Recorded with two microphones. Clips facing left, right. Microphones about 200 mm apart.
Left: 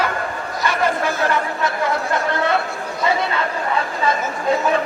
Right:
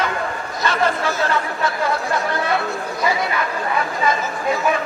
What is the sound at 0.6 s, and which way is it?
Chatter, 15° left (ahead or behind).